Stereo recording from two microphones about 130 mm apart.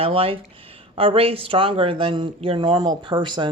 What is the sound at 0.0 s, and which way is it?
Speech, 45° right (ahead or behind).